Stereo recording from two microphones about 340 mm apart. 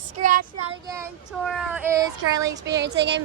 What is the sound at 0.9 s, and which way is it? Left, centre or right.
Child singing, centre.